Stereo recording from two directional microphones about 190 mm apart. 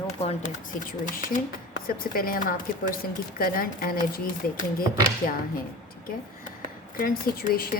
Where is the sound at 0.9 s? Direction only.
45° left (ahead or behind).